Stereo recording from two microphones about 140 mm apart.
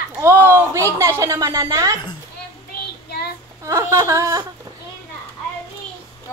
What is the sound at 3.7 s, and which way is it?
Speech, 20° right (ahead or behind).